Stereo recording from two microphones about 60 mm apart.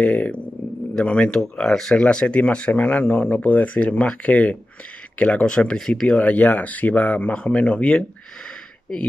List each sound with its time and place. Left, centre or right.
0.0 s speech: left
1.3 s speech: centre
6.0 s speech: left